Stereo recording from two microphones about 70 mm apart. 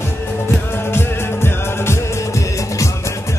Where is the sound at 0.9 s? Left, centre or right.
Left.